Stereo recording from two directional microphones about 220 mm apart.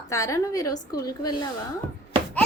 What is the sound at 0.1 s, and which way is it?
A woman's voice, 15° left (ahead or behind).